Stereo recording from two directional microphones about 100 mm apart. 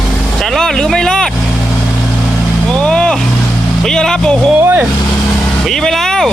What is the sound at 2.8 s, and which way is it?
Speech, 10° left (ahead or behind).